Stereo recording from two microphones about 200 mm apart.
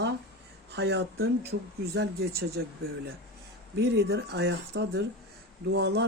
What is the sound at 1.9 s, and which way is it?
Speech, 55° right (ahead or behind).